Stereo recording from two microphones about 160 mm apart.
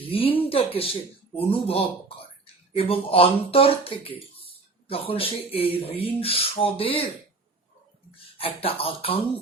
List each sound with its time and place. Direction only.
0.0 s speech: 35° left (ahead or behind)
8.4 s speech: 35° left (ahead or behind)